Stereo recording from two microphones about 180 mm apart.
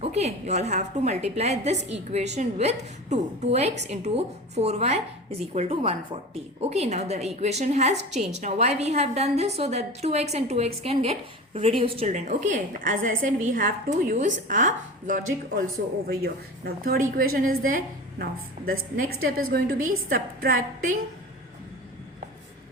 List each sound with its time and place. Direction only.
0.0 s a woman's voice: 35° right (ahead or behind)
16.0 s a woman's voice: 60° right (ahead or behind)